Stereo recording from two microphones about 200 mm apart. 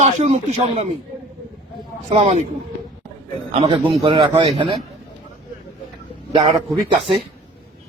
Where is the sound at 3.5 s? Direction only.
30° right (ahead or behind).